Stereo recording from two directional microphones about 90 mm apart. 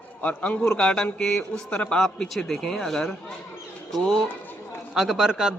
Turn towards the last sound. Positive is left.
turn(degrees=-10)  # may be behind; listen again after turning